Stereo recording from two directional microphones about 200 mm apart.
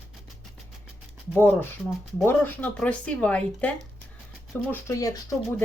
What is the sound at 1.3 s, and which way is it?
Speech, 10° left (ahead or behind).